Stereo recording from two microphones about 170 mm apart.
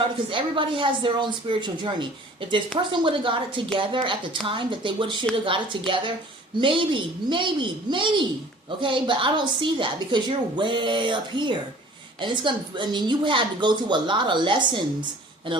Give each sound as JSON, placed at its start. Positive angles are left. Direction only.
{"t": 0.3, "sound": "a woman's voice", "side_deg": -30}